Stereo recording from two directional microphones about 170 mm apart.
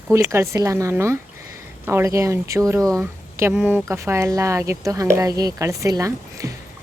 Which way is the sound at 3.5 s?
5° right (ahead or behind).